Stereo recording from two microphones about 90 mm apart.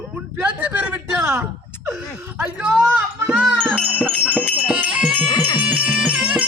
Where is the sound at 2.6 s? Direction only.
10° right (ahead or behind).